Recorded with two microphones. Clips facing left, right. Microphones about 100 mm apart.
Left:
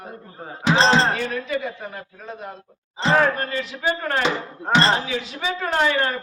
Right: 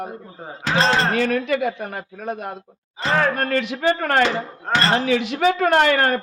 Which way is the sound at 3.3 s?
65° right (ahead or behind).